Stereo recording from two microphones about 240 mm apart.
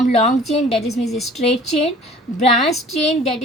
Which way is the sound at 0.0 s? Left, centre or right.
Left.